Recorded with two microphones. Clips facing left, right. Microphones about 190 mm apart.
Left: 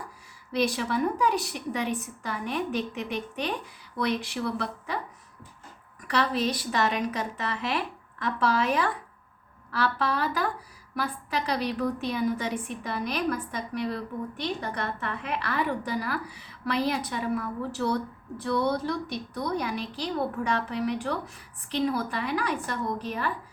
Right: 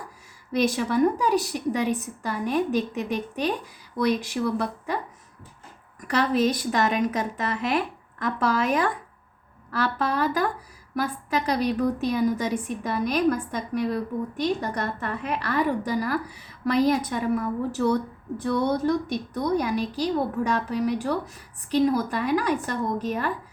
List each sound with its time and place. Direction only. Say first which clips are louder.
0.5 s a woman's voice: right 4 dB; 45° right (ahead or behind)
6.1 s a woman's voice: right 4 dB; 45° right (ahead or behind)